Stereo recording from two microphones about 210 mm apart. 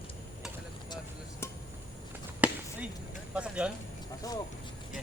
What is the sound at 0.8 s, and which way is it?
Speech, 20° left (ahead or behind).